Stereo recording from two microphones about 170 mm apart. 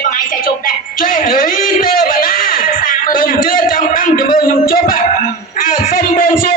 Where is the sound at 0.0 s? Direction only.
50° left (ahead or behind).